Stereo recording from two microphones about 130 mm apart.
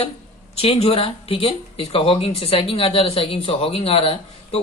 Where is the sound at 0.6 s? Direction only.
50° left (ahead or behind).